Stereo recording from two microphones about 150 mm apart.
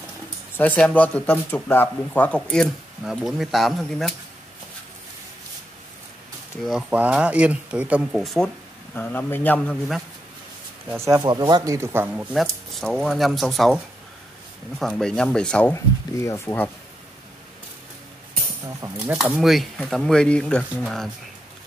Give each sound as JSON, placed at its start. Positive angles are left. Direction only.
{"t": 0.6, "sound": "speech", "side_deg": 10}
{"t": 6.6, "sound": "speech", "side_deg": -5}
{"t": 8.9, "sound": "speech", "side_deg": 10}
{"t": 10.9, "sound": "speech", "side_deg": -20}
{"t": 14.8, "sound": "speech", "side_deg": 5}
{"t": 15.7, "sound": "speech", "side_deg": 20}
{"t": 18.9, "sound": "speech", "side_deg": -10}